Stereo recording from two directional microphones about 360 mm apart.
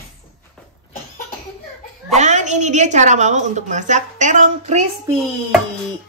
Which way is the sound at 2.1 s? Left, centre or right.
Centre.